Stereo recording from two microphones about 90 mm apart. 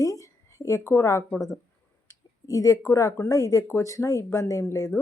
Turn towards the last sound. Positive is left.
turn(degrees=30)  # may be behind; listen again after turning